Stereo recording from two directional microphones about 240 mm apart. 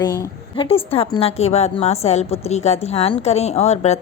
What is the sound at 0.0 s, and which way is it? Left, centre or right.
A woman's voice, centre.